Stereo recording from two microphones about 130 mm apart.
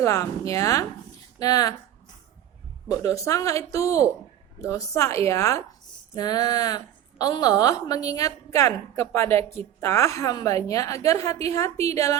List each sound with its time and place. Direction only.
0.0 s a woman's voice: 25° left (ahead or behind)
3.0 s a woman's voice: 25° left (ahead or behind)